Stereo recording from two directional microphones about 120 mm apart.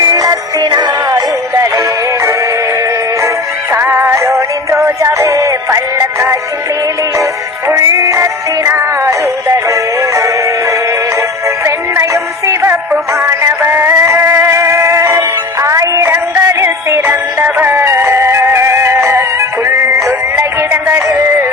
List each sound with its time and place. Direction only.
0.0 s music: 30° right (ahead or behind)
3.7 s synthetic singing: 20° right (ahead or behind)
7.7 s music: 25° right (ahead or behind)
13.1 s synthetic singing: 20° right (ahead or behind)
15.6 s music: 25° right (ahead or behind)